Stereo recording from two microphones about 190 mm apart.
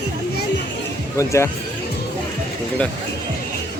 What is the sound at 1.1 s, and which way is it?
Speech, 15° left (ahead or behind).